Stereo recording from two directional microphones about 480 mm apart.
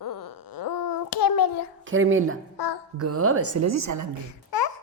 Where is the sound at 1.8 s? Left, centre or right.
Right.